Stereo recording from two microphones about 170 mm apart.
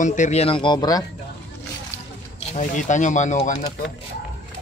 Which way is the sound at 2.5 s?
50° left (ahead or behind).